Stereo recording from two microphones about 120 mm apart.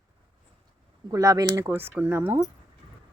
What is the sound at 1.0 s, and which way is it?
Speech, 30° right (ahead or behind).